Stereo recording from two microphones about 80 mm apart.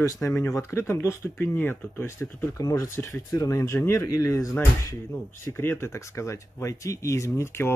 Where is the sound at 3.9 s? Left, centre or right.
Left.